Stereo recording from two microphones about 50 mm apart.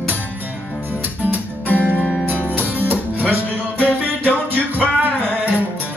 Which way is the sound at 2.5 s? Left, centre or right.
Right.